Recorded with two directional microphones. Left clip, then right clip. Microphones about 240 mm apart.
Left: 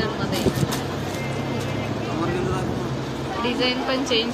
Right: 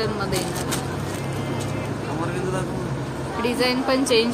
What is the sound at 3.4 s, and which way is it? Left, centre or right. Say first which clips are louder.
Speech: right 2 dB; right.